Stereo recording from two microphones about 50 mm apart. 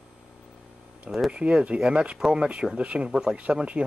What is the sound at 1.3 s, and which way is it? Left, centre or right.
Speech, right.